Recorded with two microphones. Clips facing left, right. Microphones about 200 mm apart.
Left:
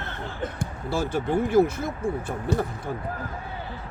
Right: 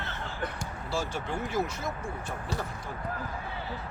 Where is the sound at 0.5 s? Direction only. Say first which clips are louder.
Left 5 dB; 55° left (ahead or behind).